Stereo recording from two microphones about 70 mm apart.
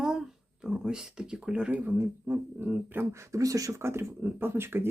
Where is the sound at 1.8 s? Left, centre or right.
Right.